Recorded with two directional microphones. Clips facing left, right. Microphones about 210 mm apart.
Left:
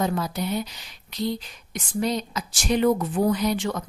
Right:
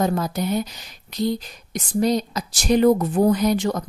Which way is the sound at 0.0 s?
45° right (ahead or behind).